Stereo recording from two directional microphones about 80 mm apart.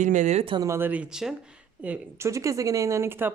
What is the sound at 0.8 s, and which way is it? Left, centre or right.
Speech, right.